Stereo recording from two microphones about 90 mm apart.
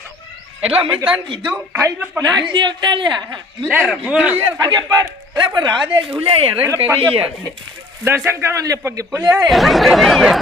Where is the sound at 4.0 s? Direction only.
15° right (ahead or behind).